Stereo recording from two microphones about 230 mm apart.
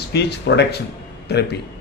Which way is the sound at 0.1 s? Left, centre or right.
Left.